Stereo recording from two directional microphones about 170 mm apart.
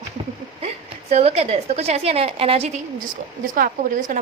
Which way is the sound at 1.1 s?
35° right (ahead or behind).